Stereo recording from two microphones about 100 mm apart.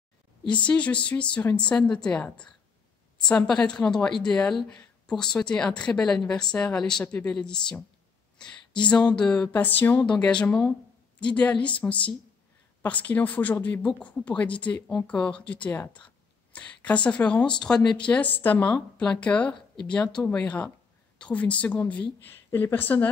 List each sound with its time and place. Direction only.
0.5 s a woman's voice: 10° left (ahead or behind)